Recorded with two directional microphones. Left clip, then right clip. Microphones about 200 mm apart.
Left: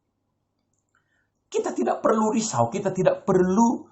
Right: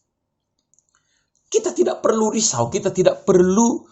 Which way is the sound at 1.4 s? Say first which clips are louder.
Right 6 dB; 45° right (ahead or behind).